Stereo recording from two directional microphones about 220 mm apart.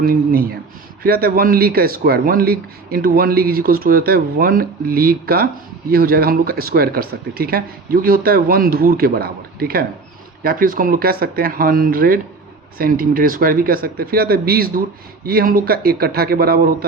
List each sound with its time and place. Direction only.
0.0 s speech: 40° right (ahead or behind)